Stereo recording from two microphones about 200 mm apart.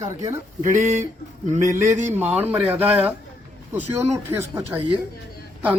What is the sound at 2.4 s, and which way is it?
Speech, 10° right (ahead or behind).